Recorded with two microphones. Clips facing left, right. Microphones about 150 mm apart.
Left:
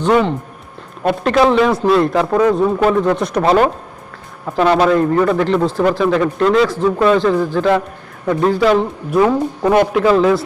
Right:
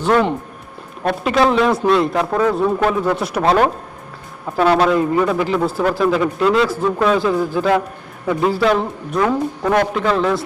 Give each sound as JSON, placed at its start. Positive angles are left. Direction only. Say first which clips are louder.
{"t": 1.0, "sound": "a man's voice", "louder": "left 3 dB", "side_deg": 0}
{"t": 9.1, "sound": "a man's voice", "louder": "left 4 dB", "side_deg": 20}